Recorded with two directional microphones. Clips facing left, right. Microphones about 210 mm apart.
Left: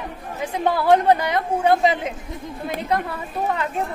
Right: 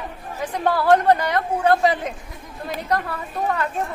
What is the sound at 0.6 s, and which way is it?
A woman's voice, 20° left (ahead or behind).